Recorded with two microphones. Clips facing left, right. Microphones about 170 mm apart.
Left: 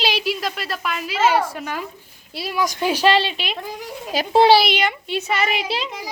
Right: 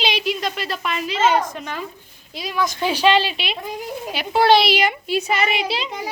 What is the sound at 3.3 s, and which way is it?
Speech, centre (ahead or behind).